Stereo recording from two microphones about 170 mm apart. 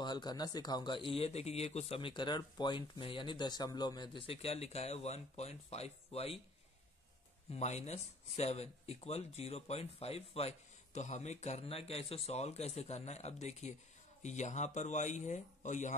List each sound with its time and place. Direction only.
0.0 s speech: 25° left (ahead or behind)
7.5 s speech: 40° left (ahead or behind)